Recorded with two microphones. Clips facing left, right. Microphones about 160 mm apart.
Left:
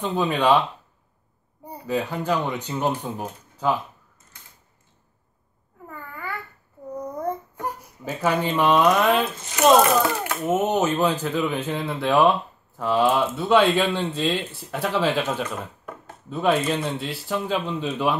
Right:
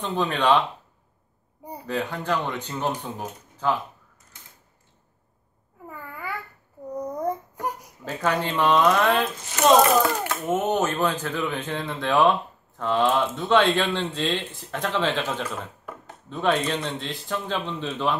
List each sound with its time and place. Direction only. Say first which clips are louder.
0.0 s speech: left 2 dB; 10° left (ahead or behind)
1.9 s speech: left 3 dB; 10° left (ahead or behind)
5.9 s babbling: even; 5° right (ahead or behind)
6.9 s a sound: right 1 dB; 15° right (ahead or behind)
8.0 s speech: left 2 dB; 10° left (ahead or behind)